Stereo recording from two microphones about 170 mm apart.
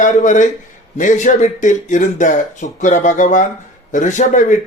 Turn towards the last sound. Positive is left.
turn(degrees=50)  # may be behind; listen again after turning